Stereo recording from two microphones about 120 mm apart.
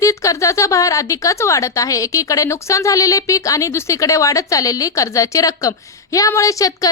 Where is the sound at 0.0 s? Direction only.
25° left (ahead or behind).